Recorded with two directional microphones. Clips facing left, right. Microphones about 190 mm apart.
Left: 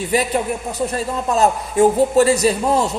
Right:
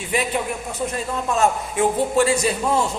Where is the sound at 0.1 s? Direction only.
35° left (ahead or behind).